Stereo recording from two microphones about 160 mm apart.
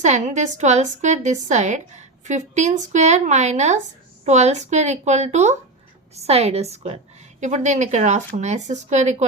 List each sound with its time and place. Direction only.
0.0 s a woman's voice: 50° right (ahead or behind)